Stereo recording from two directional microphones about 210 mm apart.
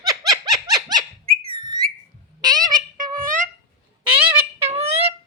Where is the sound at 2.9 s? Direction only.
40° right (ahead or behind).